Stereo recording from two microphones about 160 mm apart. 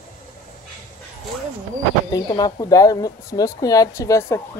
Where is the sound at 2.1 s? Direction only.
25° left (ahead or behind).